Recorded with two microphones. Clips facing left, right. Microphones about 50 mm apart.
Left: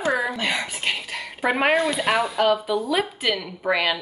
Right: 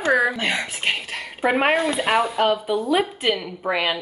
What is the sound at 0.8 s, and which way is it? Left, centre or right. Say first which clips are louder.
A woman's voice: right 2 dB; right.